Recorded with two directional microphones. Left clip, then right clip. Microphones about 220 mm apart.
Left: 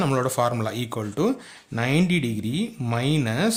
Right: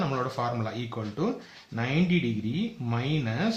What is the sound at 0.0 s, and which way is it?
Speech, 50° left (ahead or behind).